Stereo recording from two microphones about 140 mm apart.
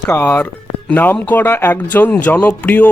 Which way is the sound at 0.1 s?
15° left (ahead or behind).